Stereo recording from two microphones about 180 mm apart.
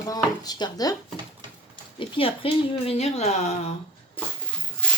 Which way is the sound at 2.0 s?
30° left (ahead or behind).